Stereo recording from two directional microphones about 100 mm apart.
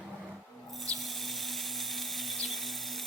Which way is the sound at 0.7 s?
Centre (ahead or behind).